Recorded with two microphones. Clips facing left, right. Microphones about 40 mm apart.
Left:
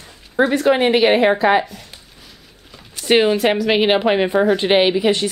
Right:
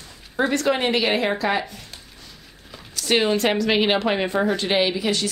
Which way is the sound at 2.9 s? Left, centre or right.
Left.